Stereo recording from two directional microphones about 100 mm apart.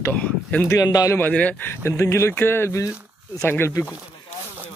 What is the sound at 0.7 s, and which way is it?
Speech, 35° left (ahead or behind).